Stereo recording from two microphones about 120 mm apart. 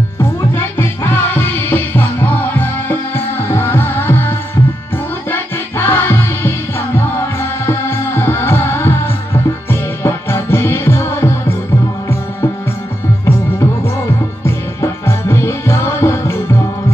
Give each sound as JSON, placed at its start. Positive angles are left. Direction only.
{"t": 0.2, "sound": "music", "side_deg": 20}
{"t": 13.2, "sound": "music", "side_deg": 20}